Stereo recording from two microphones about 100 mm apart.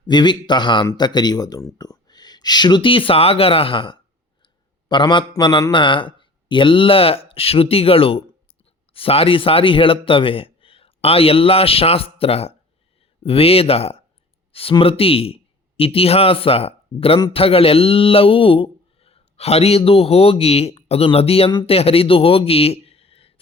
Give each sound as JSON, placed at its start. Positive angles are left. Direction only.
{"t": 0.0, "sound": "speech", "side_deg": 50}
{"t": 4.4, "sound": "a sound", "side_deg": 50}
{"t": 5.7, "sound": "a man's voice", "side_deg": 55}
{"t": 14.5, "sound": "speech", "side_deg": 65}